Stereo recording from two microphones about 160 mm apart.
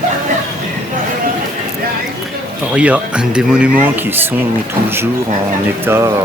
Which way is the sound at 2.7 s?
5° right (ahead or behind).